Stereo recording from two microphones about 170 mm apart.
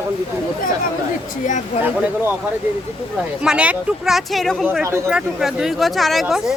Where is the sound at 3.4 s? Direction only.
5° right (ahead or behind).